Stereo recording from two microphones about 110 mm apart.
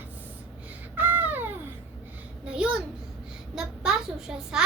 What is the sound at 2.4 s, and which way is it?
A child's voice, 10° right (ahead or behind).